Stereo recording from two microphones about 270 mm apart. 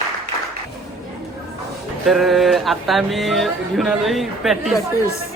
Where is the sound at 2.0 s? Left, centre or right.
Centre.